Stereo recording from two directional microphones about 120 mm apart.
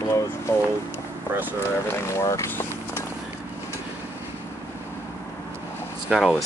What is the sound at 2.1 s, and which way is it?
Speech, 25° left (ahead or behind).